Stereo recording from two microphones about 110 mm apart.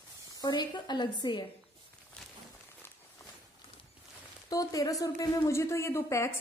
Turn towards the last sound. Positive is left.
turn(degrees=25)  # may be behind; listen again after turning